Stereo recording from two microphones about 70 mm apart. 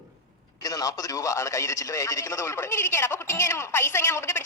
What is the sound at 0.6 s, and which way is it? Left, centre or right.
A man's voice, left.